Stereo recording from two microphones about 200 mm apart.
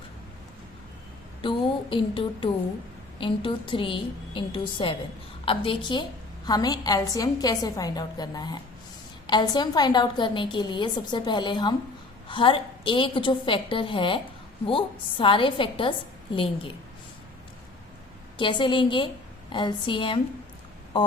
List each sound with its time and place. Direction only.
1.4 s a woman's voice: 25° left (ahead or behind)
18.3 s a woman's voice: 25° left (ahead or behind)